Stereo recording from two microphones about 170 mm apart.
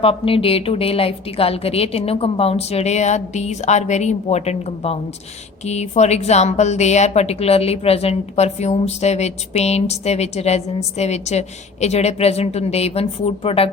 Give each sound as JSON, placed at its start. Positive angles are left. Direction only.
{"t": 0.0, "sound": "a woman's voice", "side_deg": 35}